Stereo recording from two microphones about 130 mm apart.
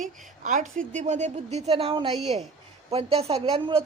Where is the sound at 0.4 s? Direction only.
80° right.